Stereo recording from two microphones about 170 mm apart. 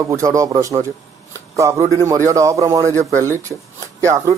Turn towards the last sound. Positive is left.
turn(degrees=-20)  # may be behind; listen again after turning